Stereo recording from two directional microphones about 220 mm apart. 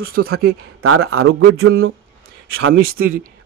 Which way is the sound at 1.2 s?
70° right (ahead or behind).